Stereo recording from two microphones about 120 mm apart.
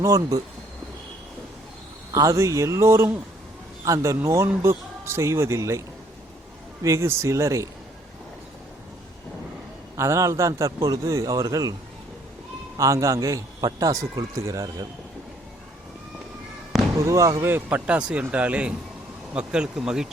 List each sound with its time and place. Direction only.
0.0 s a man's voice: 30° right (ahead or behind)
2.1 s a man's voice: 25° right (ahead or behind)
6.8 s a man's voice: 25° right (ahead or behind)
10.0 s a man's voice: 25° right (ahead or behind)
12.7 s a man's voice: 25° right (ahead or behind)
17.0 s a man's voice: 25° right (ahead or behind)
17.5 s speech: 15° right (ahead or behind)